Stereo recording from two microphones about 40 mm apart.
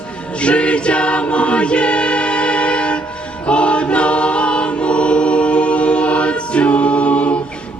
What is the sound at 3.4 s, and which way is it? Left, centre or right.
Choir, left.